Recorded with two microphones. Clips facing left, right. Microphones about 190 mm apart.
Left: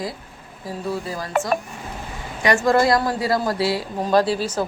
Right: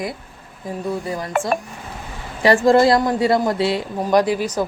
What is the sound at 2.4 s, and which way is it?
Speech, 30° right (ahead or behind).